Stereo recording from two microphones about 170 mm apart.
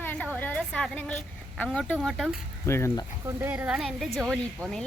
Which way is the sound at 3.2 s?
10° right (ahead or behind).